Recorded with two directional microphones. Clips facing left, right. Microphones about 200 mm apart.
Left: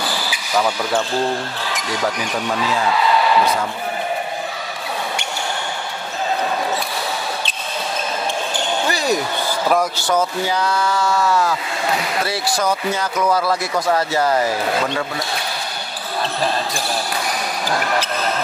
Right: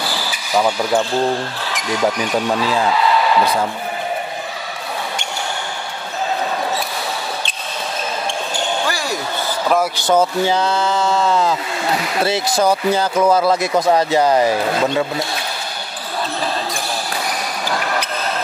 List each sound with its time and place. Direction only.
0.6 s speech: 10° right (ahead or behind)
8.8 s basketball bounce: 20° left (ahead or behind)
9.9 s speech: 25° right (ahead or behind)